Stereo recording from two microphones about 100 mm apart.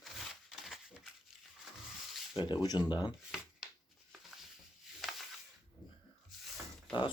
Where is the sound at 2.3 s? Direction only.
50° left (ahead or behind).